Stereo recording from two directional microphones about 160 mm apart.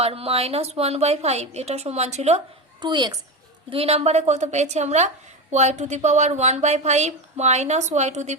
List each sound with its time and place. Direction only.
0.0 s a woman's voice: 40° right (ahead or behind)
2.8 s a woman's voice: 25° right (ahead or behind)
3.7 s a woman's voice: 40° right (ahead or behind)